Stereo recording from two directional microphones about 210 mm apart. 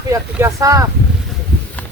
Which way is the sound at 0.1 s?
15° right (ahead or behind).